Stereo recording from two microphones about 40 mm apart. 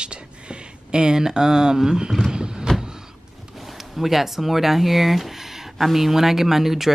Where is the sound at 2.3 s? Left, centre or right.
Centre.